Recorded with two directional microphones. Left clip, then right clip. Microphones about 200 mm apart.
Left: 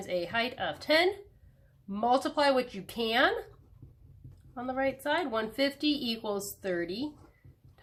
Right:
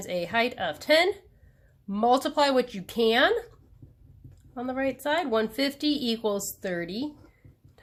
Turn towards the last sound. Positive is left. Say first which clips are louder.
# right 2 dB
turn(degrees=-35)  # may be behind; listen again after turning